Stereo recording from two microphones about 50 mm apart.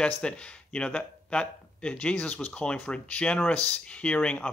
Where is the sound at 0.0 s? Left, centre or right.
Left.